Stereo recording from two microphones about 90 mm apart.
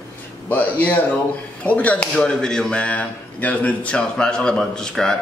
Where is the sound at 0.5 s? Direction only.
20° left (ahead or behind).